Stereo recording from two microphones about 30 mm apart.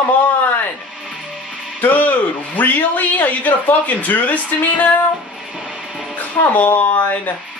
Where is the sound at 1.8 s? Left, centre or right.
Left.